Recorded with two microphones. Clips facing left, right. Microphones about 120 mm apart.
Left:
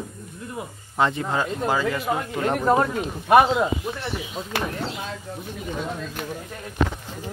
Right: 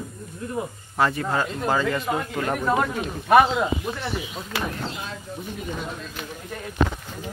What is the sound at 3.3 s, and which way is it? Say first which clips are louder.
Speech: left 1 dB; 20° left (ahead or behind).